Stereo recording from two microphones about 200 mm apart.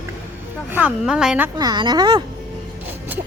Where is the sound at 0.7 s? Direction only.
5° right (ahead or behind).